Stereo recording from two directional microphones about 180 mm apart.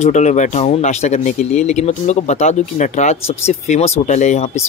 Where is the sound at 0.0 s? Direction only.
40° left (ahead or behind).